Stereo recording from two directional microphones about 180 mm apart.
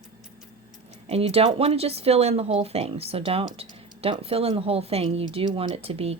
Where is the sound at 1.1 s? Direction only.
35° right (ahead or behind).